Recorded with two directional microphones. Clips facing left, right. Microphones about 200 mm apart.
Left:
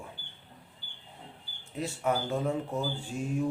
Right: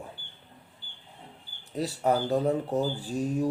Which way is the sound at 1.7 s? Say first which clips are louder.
Right 4 dB; 35° right (ahead or behind).